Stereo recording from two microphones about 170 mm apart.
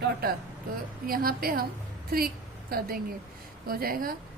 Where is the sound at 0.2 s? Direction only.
60° right (ahead or behind).